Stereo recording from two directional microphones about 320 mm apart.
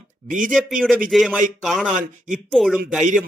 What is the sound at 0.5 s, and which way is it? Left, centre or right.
A man's voice, centre.